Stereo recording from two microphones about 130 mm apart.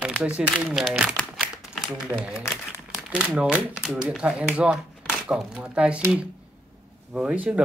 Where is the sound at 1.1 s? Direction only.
Centre (ahead or behind).